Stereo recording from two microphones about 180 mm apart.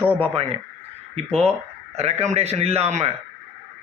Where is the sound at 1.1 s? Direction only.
35° right (ahead or behind).